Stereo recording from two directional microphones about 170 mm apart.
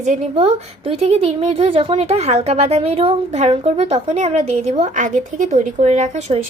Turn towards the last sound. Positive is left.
turn(degrees=-40)  # may be behind; listen again after turning